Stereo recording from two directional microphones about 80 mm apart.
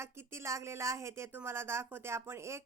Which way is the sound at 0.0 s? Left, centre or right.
Right.